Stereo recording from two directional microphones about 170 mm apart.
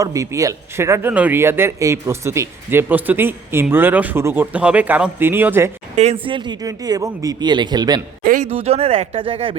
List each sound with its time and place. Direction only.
0.0 s speech: 20° right (ahead or behind)
6.2 s speech: 30° right (ahead or behind)
8.2 s speech: 55° right (ahead or behind)
8.4 s speech: 35° right (ahead or behind)